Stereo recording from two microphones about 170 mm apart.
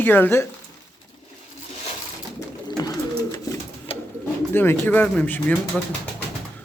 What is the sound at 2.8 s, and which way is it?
Bird, 20° left (ahead or behind).